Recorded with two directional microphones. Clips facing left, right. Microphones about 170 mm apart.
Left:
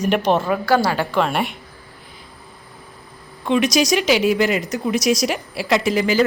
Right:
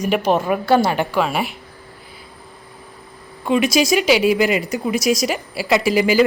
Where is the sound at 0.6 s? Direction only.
25° right (ahead or behind).